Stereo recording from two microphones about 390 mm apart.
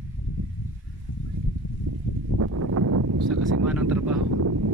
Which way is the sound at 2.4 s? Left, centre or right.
Right.